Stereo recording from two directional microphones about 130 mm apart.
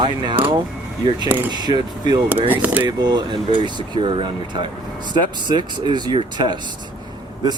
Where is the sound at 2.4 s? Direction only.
15° right (ahead or behind).